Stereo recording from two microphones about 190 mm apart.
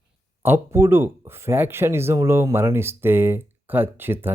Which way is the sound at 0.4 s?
10° right (ahead or behind).